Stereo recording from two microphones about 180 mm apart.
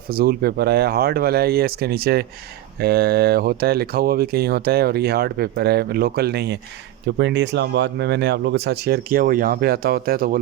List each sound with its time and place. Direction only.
0.1 s speech: 55° right (ahead or behind)
7.2 s speech: 75° right (ahead or behind); by 10.3 s 55° right (ahead or behind)